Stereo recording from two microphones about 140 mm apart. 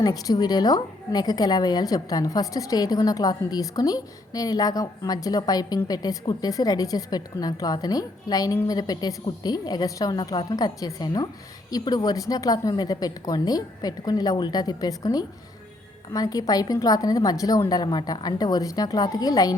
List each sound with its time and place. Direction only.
0.0 s a woman's voice: 30° left (ahead or behind)